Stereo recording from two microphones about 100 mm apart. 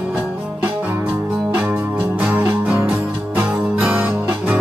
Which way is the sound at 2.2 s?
20° right (ahead or behind).